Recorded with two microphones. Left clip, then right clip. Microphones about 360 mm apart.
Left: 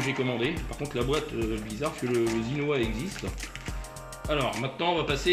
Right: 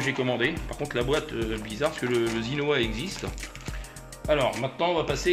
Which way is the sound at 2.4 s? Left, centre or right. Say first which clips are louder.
Right 3 dB; right.